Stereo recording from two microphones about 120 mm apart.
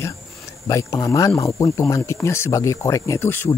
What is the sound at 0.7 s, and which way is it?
Speech, 25° left (ahead or behind).